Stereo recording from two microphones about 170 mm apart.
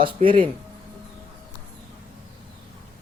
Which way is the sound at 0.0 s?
30° right (ahead or behind).